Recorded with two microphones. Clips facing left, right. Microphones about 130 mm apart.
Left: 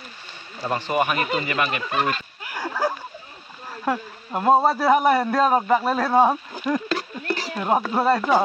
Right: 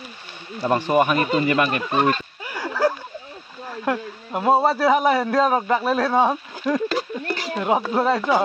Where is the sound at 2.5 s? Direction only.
Centre (ahead or behind).